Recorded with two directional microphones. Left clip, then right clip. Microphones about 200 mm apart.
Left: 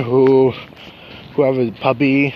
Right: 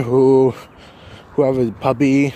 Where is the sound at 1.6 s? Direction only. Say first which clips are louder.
Left 1 dB; 30° right (ahead or behind).